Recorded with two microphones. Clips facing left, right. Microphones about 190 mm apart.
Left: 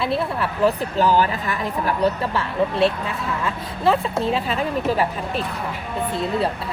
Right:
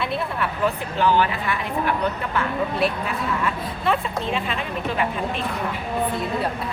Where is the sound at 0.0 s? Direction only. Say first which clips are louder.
Left 3 dB; 30° left (ahead or behind).